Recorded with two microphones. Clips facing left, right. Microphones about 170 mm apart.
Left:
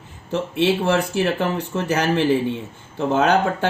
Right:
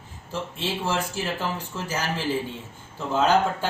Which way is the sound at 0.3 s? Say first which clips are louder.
Left 11 dB; 70° left (ahead or behind).